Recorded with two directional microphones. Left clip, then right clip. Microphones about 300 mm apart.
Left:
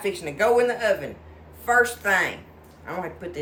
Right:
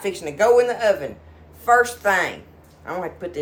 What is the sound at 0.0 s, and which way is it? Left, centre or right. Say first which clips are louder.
A man's voice: right 3 dB; centre.